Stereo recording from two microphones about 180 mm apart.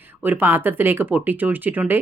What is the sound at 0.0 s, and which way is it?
Speech, 10° right (ahead or behind).